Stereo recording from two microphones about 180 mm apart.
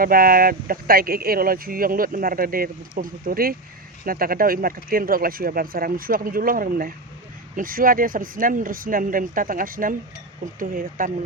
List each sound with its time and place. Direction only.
0.0 s speech: 55° right (ahead or behind)